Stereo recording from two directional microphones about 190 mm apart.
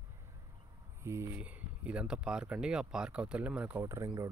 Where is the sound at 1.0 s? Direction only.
15° right (ahead or behind).